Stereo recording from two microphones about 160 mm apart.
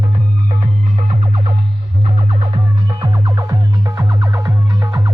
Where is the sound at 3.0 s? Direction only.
20° right (ahead or behind).